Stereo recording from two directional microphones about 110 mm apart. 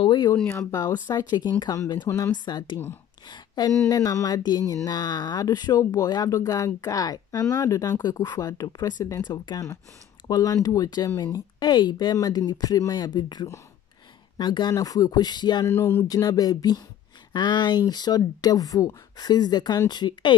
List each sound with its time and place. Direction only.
0.0 s a sound: 45° left (ahead or behind)
0.5 s speech: 25° left (ahead or behind)
1.0 s mantra: 40° left (ahead or behind)
2.0 s speech: 25° left (ahead or behind)
2.3 s speech: 45° left (ahead or behind)
3.3 s mantra: 40° left (ahead or behind)
15.6 s speech: 20° left (ahead or behind)
16.1 s mantra: 35° left (ahead or behind)